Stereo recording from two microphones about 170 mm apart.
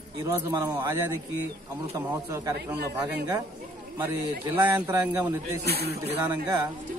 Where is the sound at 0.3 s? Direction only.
20° right (ahead or behind).